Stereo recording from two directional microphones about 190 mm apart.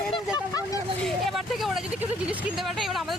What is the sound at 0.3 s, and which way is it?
Vehicle, 20° left (ahead or behind).